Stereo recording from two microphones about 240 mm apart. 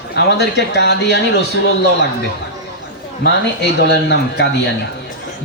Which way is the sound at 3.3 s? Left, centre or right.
Left.